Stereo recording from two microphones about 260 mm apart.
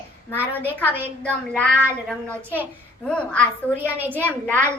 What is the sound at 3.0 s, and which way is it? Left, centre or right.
Speech, centre.